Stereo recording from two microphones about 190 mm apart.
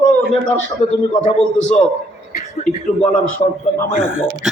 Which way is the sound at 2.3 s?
40° left (ahead or behind).